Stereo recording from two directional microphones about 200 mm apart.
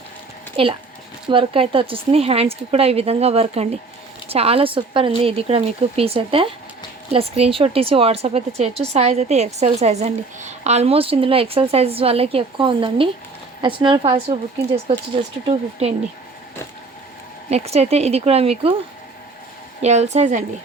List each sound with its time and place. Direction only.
0.5 s a woman's voice: 25° right (ahead or behind)
17.5 s a woman's voice: 30° right (ahead or behind)
19.8 s a woman's voice: 35° right (ahead or behind)